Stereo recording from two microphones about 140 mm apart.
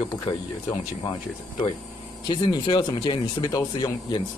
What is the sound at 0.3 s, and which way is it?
Speech, 35° left (ahead or behind).